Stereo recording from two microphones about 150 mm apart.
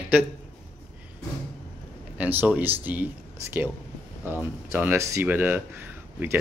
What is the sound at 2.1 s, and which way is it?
Speech, 10° right (ahead or behind).